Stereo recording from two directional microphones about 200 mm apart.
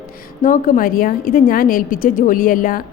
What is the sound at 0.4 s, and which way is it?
A woman's voice, 45° left (ahead or behind).